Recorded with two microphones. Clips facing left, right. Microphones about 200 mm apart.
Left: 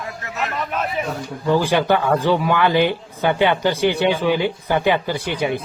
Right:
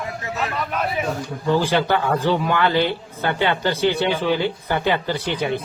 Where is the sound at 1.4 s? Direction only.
15° left (ahead or behind).